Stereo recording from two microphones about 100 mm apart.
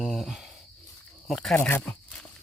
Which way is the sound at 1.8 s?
10° left (ahead or behind).